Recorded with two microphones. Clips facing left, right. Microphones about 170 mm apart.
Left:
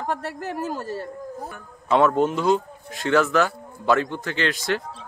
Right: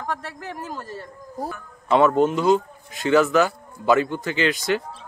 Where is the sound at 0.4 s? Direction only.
40° left (ahead or behind).